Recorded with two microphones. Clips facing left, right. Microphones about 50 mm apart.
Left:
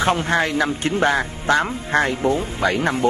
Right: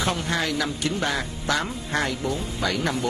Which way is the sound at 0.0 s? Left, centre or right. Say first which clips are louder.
Left 7 dB; left.